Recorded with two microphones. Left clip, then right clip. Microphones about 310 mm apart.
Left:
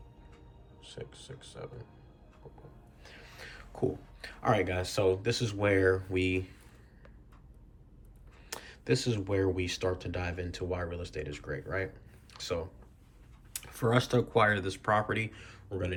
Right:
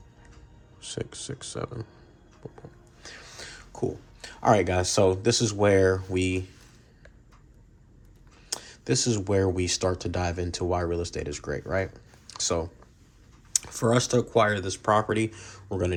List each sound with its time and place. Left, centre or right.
0.8 s speech: right
3.0 s speech: right
8.4 s speech: centre